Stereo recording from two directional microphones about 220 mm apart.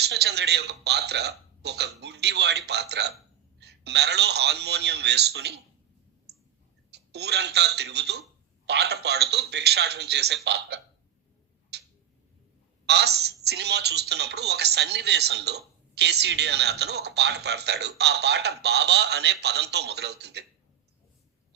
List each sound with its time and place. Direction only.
0.0 s speech: 50° right (ahead or behind)
6.9 s speech: 50° right (ahead or behind)
11.7 s tick-tock: 50° right (ahead or behind)
12.9 s speech: 50° right (ahead or behind)